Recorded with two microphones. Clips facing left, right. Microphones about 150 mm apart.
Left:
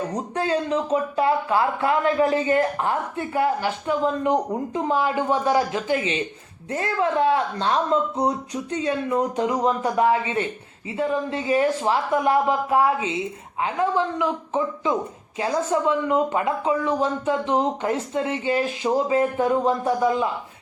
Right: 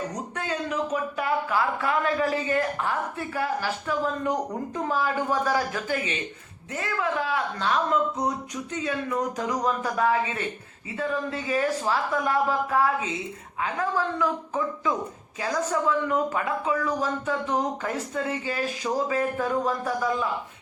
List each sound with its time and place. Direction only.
0.1 s speech: 30° left (ahead or behind)